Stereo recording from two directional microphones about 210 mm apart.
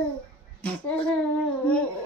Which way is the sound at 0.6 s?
5° left (ahead or behind).